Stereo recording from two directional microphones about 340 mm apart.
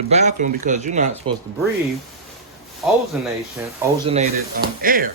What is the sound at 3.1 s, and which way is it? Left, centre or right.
Speech, centre.